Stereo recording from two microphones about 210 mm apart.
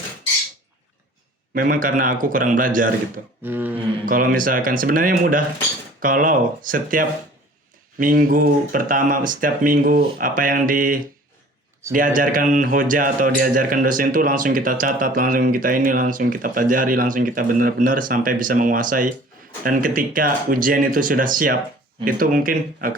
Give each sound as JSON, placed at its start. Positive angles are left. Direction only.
{"t": 1.5, "sound": "a man's voice", "side_deg": -40}
{"t": 3.4, "sound": "a sound", "side_deg": -10}
{"t": 4.0, "sound": "a man's voice", "side_deg": -40}